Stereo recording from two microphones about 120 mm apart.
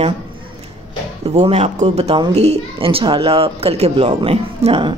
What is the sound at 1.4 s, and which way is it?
A woman's voice, 60° right (ahead or behind).